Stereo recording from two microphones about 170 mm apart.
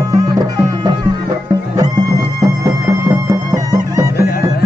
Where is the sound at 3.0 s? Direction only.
20° right (ahead or behind).